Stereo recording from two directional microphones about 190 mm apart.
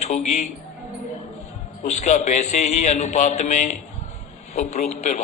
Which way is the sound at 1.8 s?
35° left (ahead or behind).